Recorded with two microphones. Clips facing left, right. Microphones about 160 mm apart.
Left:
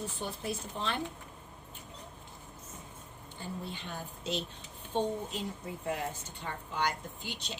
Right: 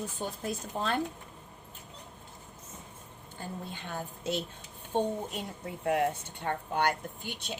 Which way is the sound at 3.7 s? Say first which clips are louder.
Right 3 dB; 55° right (ahead or behind).